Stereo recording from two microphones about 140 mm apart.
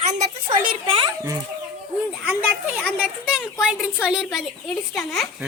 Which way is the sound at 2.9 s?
5° right (ahead or behind).